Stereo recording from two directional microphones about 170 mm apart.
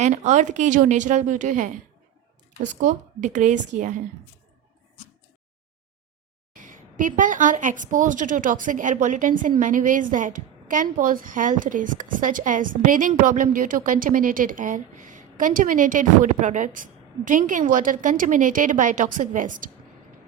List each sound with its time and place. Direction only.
0.0 s a woman's voice: 45° right (ahead or behind)
6.5 s a woman's voice: 50° right (ahead or behind)